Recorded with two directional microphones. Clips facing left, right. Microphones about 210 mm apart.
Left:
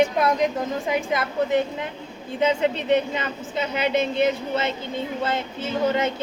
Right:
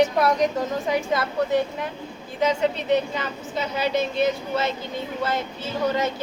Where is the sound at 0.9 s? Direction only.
20° left (ahead or behind).